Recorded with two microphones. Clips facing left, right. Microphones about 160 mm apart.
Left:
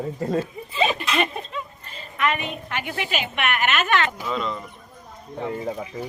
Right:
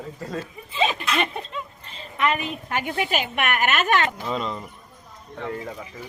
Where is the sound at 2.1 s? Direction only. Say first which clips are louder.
Right 1 dB; 35° right (ahead or behind).